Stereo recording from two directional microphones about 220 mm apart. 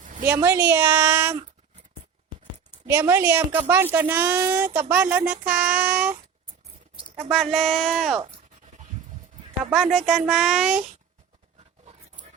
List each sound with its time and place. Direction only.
0.0 s a sound: 35° right (ahead or behind)
0.3 s speech: 10° right (ahead or behind)
2.9 s speech: 10° right (ahead or behind)
7.3 s speech: centre (ahead or behind)
9.7 s speech: centre (ahead or behind)